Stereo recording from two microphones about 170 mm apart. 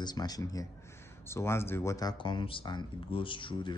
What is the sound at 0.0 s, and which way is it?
Speech, 25° left (ahead or behind).